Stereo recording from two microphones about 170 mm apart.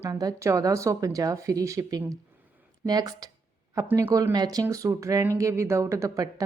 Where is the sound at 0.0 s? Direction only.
20° right (ahead or behind).